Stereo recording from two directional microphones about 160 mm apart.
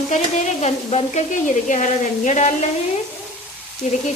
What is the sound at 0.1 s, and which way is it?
Sizzle, 45° left (ahead or behind).